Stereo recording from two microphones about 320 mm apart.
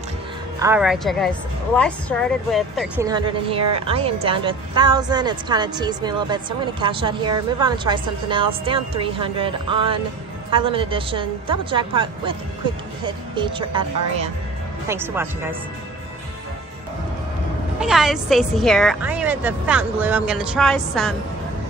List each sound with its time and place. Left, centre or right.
0.6 s a woman's voice: centre
3.1 s a woman's voice: centre
14.9 s a woman's voice: centre
17.7 s a woman's voice: centre